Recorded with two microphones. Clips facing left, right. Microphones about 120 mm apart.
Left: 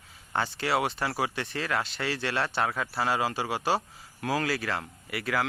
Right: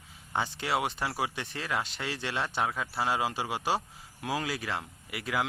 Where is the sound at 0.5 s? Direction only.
15° right (ahead or behind).